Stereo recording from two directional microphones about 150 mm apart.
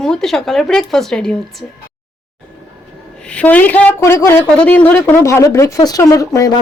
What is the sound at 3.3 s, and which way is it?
A woman's voice, 10° left (ahead or behind).